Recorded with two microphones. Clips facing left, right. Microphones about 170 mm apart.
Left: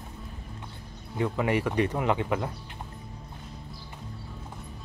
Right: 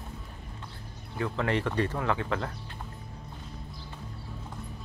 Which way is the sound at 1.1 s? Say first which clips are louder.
Left 3 dB; 15° left (ahead or behind).